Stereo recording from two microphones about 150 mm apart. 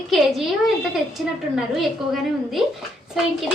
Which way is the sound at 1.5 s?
Centre (ahead or behind).